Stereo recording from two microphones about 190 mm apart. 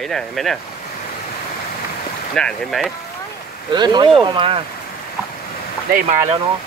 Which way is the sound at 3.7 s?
20° right (ahead or behind).